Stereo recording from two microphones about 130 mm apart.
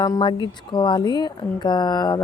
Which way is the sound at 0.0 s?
30° left (ahead or behind).